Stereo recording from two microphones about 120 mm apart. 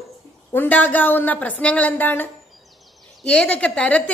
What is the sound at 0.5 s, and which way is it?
Speech, 15° left (ahead or behind).